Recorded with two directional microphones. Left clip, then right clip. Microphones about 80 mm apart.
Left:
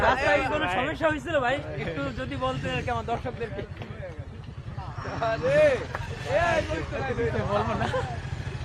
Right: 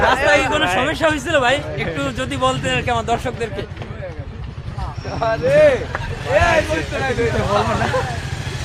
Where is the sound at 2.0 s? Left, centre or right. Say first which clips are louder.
Right 11 dB; right.